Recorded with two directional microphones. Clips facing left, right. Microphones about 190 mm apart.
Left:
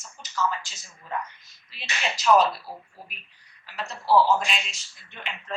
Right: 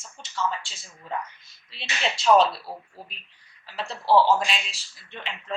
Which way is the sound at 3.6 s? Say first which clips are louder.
Right 2 dB; 30° right (ahead or behind).